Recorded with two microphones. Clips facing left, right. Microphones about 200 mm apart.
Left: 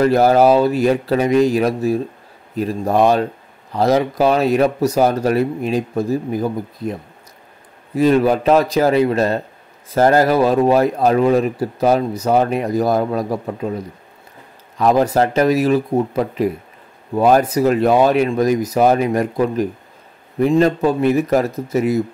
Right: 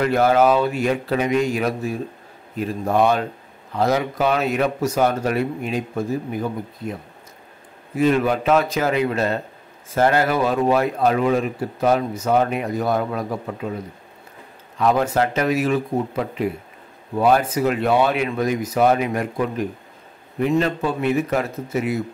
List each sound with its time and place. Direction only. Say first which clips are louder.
0.0 s speech: left 4 dB; 40° left (ahead or behind)
7.9 s speech: left 4 dB; 35° left (ahead or behind)
14.8 s speech: left 4 dB; 40° left (ahead or behind)